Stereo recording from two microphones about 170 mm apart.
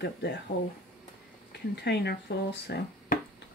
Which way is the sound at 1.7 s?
80° left.